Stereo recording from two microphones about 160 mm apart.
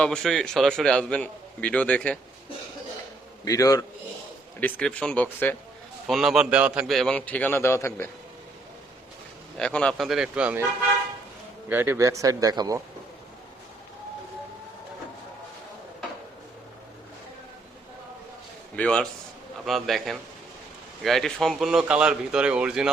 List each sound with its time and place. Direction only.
0.0 s a man's voice: 5° left (ahead or behind)
3.4 s a man's voice: 20° left (ahead or behind)
4.6 s speech: 5° left (ahead or behind)
6.1 s a man's voice: centre (ahead or behind); by 8.1 s 15° left (ahead or behind)
9.6 s a man's voice: 5° left (ahead or behind); by 10.7 s 10° right (ahead or behind)
11.7 s a man's voice: 15° right (ahead or behind)
18.8 s a man's voice: 5° left (ahead or behind)